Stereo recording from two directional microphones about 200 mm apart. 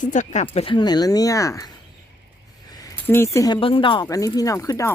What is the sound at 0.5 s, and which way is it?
Speech, 25° left (ahead or behind).